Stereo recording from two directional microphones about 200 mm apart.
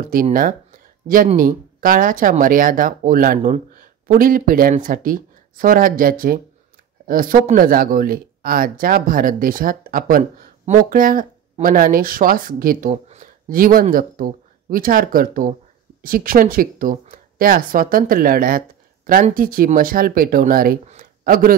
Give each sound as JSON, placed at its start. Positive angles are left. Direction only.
{"t": 0.0, "sound": "speech", "side_deg": -45}